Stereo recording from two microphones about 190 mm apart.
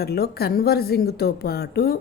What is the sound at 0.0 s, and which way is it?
Speech, 55° left (ahead or behind).